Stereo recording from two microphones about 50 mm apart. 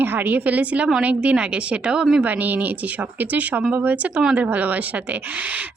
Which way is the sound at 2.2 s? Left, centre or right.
Right.